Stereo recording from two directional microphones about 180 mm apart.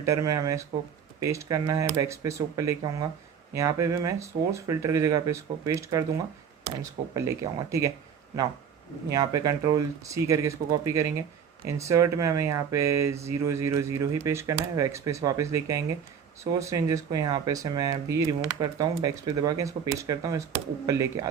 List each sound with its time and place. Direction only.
0.0 s speech: 15° right (ahead or behind)
9.0 s speech: 20° right (ahead or behind)